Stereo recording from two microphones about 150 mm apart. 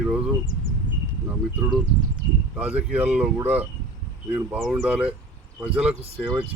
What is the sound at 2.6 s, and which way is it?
Speech, 10° right (ahead or behind).